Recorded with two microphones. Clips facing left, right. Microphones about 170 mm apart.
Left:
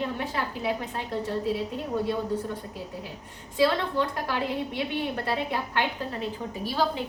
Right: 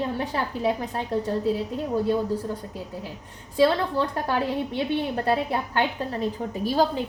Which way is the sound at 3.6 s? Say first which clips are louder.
Right 3 dB; 35° right (ahead or behind).